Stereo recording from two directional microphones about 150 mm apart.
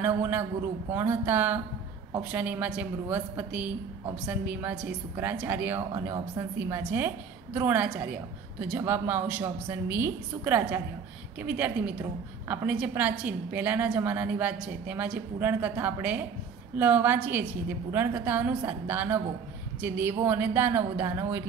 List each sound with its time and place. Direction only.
0.0 s a woman's voice: 15° right (ahead or behind)